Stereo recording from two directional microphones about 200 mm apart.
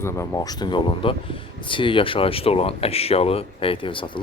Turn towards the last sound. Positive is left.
turn(degrees=25)  # may be behind; listen again after turning